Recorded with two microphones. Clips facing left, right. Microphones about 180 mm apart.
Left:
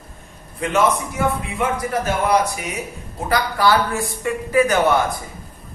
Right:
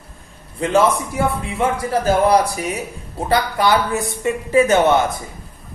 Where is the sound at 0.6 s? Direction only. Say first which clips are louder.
Right 3 dB; 30° right (ahead or behind).